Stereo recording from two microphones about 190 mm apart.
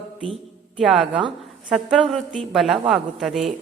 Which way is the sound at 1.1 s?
30° right (ahead or behind).